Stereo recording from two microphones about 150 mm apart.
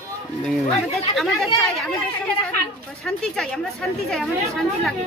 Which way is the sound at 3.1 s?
5° left (ahead or behind).